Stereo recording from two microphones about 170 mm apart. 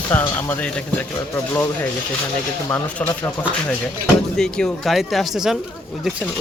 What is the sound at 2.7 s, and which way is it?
Speech, 10° left (ahead or behind).